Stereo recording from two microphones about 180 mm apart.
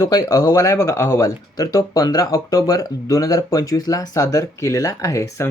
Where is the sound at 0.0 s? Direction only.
20° left (ahead or behind).